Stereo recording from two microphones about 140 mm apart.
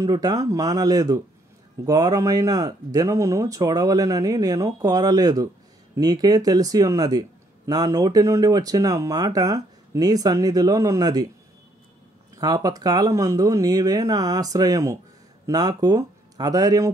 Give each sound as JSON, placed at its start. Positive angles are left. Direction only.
{"t": 0.0, "sound": "speech", "side_deg": -25}
{"t": 12.4, "sound": "speech", "side_deg": -25}